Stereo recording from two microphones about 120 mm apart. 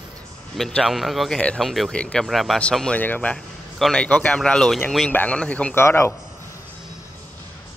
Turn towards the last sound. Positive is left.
turn(degrees=20)  # may be behind; listen again after turning